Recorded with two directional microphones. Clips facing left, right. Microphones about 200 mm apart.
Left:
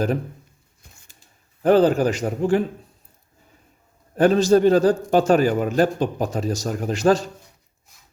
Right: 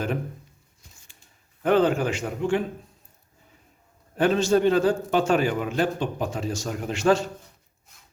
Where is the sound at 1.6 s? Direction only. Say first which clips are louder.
Left 5 dB; 35° left (ahead or behind).